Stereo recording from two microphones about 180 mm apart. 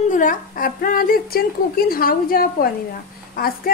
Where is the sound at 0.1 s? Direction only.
50° left (ahead or behind).